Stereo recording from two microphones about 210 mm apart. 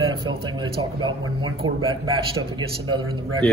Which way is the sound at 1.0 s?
25° right (ahead or behind).